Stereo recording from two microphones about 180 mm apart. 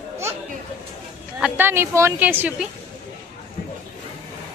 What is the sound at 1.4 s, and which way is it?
A woman's voice, 10° right (ahead or behind).